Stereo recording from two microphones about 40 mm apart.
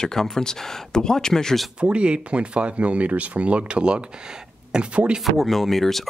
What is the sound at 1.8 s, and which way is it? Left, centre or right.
Speech, right.